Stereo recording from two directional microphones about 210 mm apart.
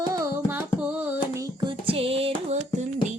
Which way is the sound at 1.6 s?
25° right (ahead or behind).